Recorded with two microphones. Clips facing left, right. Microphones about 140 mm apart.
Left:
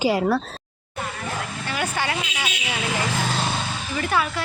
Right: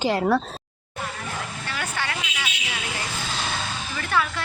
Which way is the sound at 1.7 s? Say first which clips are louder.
Left 5 dB; 15° left (ahead or behind).